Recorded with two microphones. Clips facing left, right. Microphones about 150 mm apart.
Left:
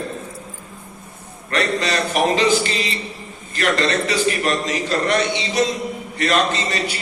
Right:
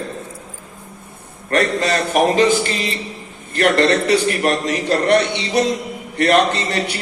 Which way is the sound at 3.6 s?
60° right (ahead or behind).